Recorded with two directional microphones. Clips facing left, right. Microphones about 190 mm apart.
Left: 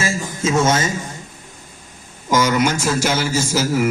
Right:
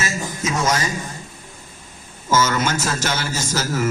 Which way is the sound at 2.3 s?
15° left (ahead or behind).